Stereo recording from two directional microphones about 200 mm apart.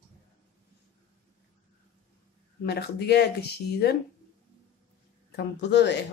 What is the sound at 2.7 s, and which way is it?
Speech, 55° left (ahead or behind).